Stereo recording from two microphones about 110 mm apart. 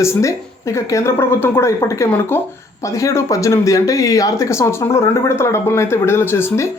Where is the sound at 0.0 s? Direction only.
25° left (ahead or behind).